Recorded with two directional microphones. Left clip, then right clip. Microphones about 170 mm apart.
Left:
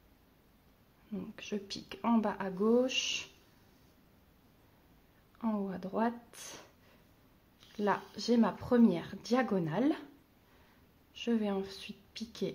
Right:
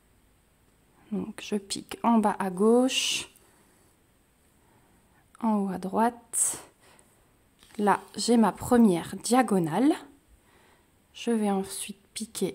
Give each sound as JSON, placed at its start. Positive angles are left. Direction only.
{"t": 1.1, "sound": "a woman's voice", "side_deg": -50}
{"t": 5.4, "sound": "speech", "side_deg": -55}
{"t": 7.7, "sound": "a woman's voice", "side_deg": -50}
{"t": 11.1, "sound": "a woman's voice", "side_deg": -55}